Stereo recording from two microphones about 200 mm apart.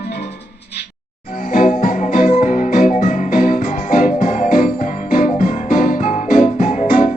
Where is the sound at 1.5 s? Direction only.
40° left (ahead or behind).